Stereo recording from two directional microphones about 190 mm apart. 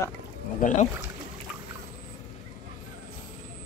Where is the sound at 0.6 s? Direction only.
40° left (ahead or behind).